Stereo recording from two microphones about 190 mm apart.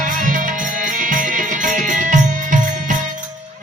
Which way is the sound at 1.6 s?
40° right (ahead or behind).